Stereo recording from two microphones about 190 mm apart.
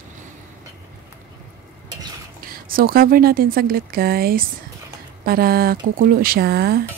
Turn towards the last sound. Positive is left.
turn(degrees=-55)  # may be behind; listen again after turning